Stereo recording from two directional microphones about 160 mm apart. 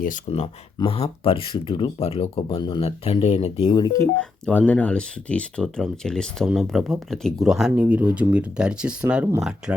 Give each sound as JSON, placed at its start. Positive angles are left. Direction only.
{"t": 0.3, "sound": "speech", "side_deg": 35}
{"t": 4.2, "sound": "speech", "side_deg": 10}